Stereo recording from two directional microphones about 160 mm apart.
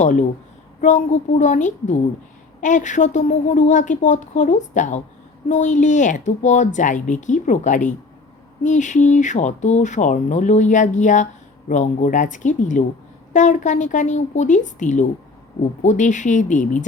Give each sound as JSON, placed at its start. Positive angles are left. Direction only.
{"t": 0.0, "sound": "speech", "side_deg": 50}